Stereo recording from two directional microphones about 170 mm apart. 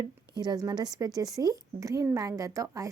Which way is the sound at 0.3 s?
25° right (ahead or behind).